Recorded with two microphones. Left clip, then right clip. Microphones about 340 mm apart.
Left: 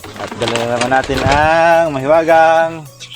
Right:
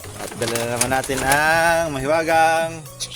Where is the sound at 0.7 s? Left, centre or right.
Right.